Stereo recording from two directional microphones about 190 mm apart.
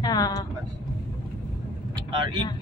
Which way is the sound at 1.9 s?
25° right (ahead or behind).